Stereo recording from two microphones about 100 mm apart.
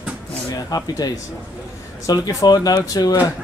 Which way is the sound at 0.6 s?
40° left (ahead or behind).